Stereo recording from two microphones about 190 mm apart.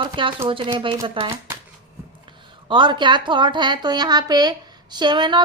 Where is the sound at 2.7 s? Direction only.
25° right (ahead or behind).